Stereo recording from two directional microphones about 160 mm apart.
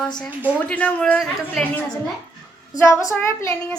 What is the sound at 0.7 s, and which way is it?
Speech, 10° left (ahead or behind).